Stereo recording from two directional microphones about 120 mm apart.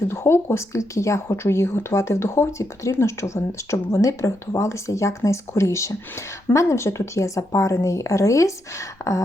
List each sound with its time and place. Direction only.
0.1 s speech: 20° left (ahead or behind)